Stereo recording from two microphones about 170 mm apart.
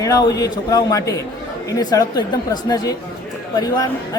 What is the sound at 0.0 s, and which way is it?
A woman's voice, 20° left (ahead or behind).